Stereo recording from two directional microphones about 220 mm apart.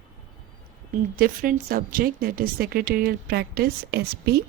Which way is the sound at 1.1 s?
40° right (ahead or behind).